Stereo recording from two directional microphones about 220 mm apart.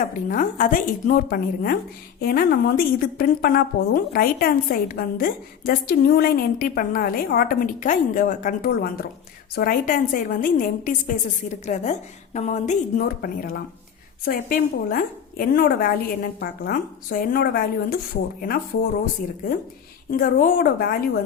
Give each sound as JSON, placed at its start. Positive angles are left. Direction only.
{"t": 0.3, "sound": "a woman's voice", "side_deg": 40}
{"t": 20.1, "sound": "a woman's voice", "side_deg": 40}